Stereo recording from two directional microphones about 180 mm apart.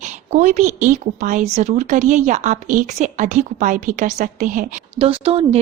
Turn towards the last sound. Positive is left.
turn(degrees=-30)  # may be behind; listen again after turning